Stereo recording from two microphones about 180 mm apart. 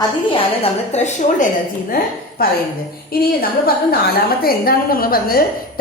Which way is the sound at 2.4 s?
55° left (ahead or behind).